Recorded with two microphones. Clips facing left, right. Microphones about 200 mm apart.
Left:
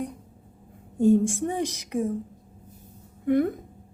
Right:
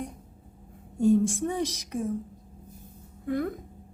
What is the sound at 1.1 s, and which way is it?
Speech, 55° left (ahead or behind).